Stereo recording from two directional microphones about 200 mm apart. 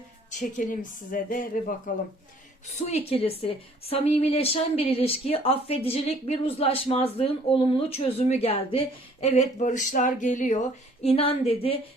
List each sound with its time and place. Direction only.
0.3 s speech: 40° left (ahead or behind)
2.6 s a woman's voice: 35° left (ahead or behind)